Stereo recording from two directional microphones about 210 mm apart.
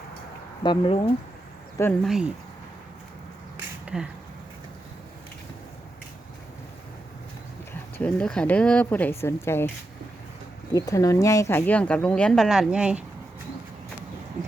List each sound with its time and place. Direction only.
0.6 s speech: 25° left (ahead or behind)
2.0 s speech: centre (ahead or behind)
3.8 s speech: 5° right (ahead or behind)
7.9 s speech: 5° left (ahead or behind)
10.8 s speech: 15° left (ahead or behind); by 13.1 s 5° right (ahead or behind)